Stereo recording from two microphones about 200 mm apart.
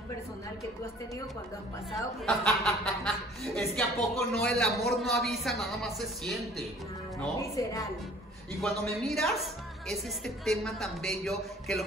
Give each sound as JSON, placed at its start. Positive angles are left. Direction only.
{"t": 2.2, "sound": "a woman's voice", "side_deg": 0}
{"t": 7.2, "sound": "a woman's voice", "side_deg": 15}
{"t": 9.1, "sound": "a woman's voice", "side_deg": 0}